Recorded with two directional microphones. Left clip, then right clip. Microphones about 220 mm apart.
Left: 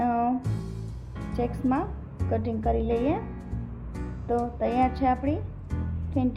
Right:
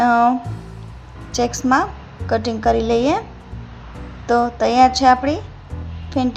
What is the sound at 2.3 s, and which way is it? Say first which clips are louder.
Speech: right 10 dB; 15° right (ahead or behind).